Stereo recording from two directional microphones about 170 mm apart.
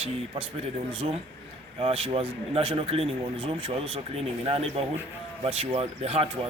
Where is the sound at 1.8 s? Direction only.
35° right (ahead or behind).